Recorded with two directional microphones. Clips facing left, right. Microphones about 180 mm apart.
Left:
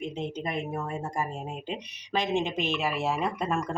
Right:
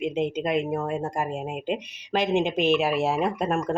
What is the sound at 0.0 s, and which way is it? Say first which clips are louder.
A woman's voice: right 7 dB; 80° right.